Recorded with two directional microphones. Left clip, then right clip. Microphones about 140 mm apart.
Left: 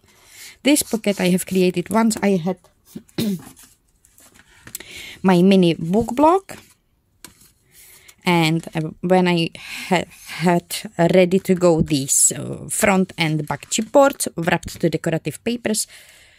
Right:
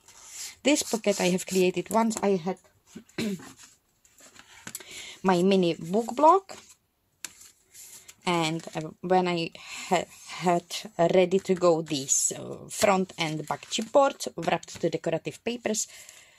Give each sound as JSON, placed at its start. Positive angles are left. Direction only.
{"t": 0.5, "sound": "speech", "side_deg": 30}
{"t": 4.7, "sound": "a sound", "side_deg": 35}
{"t": 6.0, "sound": "speech", "side_deg": 55}
{"t": 8.2, "sound": "speech", "side_deg": 45}